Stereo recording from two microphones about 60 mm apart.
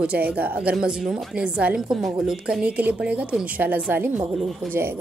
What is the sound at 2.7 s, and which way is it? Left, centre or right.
A woman's voice, right.